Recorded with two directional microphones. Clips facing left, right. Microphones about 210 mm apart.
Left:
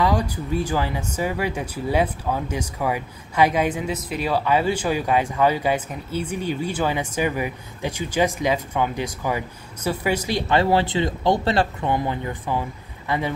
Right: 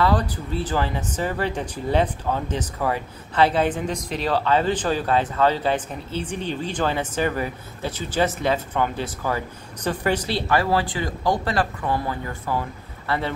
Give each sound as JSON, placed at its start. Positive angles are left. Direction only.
{"t": 0.0, "sound": "speech", "side_deg": 10}
{"t": 10.5, "sound": "speech", "side_deg": 25}